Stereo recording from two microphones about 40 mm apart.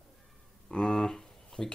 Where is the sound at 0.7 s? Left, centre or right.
Centre.